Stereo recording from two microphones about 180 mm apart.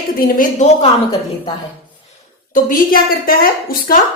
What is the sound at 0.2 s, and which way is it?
Speech, 45° left (ahead or behind).